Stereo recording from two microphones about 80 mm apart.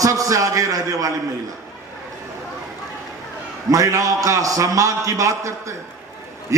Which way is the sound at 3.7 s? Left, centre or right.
Right.